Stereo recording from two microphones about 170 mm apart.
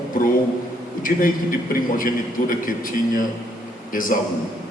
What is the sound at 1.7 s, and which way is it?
A man's voice, 55° left (ahead or behind).